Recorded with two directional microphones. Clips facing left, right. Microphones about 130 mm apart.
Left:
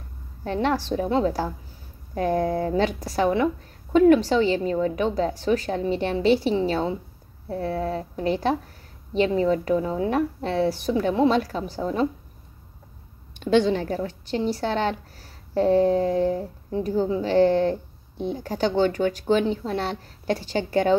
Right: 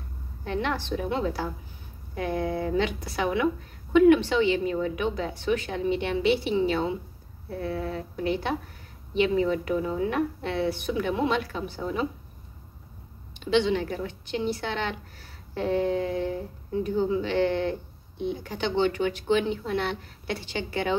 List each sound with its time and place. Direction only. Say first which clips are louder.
0.4 s a woman's voice: left 5 dB; 40° left (ahead or behind)
13.3 s a woman's voice: left 4 dB; 45° left (ahead or behind)